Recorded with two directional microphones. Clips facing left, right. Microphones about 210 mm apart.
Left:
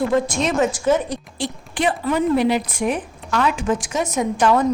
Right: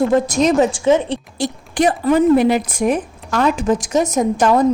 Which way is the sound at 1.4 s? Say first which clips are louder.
Right 6 dB; 45° right (ahead or behind).